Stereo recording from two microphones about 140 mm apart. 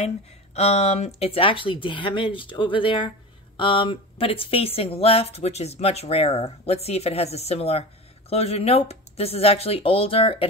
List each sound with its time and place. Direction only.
0.6 s speech: 50° left (ahead or behind)